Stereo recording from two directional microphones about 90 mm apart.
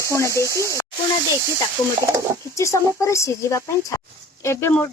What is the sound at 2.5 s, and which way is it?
Speech, 35° left (ahead or behind).